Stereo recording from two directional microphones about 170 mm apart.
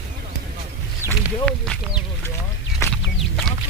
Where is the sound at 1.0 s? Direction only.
15° right (ahead or behind).